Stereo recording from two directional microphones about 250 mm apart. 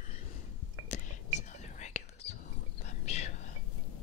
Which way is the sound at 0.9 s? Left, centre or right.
Left.